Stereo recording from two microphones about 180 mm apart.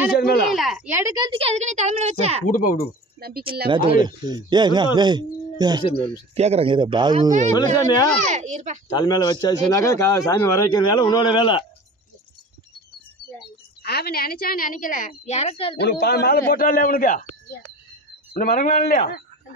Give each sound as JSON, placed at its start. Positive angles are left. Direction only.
{"t": 0.5, "sound": "a sound", "side_deg": 0}
{"t": 0.9, "sound": "speech", "side_deg": -15}
{"t": 1.4, "sound": "a child's voice", "side_deg": -40}
{"t": 2.5, "sound": "a woman's voice", "side_deg": 50}
{"t": 3.2, "sound": "speech", "side_deg": -60}
{"t": 3.6, "sound": "speech", "side_deg": -30}
{"t": 6.3, "sound": "speech", "side_deg": -35}
{"t": 7.5, "sound": "speech", "side_deg": 20}
{"t": 8.3, "sound": "a child's voice", "side_deg": -40}
{"t": 8.8, "sound": "speech", "side_deg": 25}
{"t": 13.8, "sound": "a woman's voice", "side_deg": 60}
{"t": 15.8, "sound": "a man's voice", "side_deg": 60}
{"t": 18.3, "sound": "a man's voice", "side_deg": 55}